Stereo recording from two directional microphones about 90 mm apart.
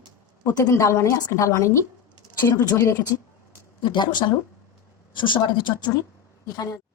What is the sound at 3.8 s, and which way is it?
A woman's voice, 60° left (ahead or behind).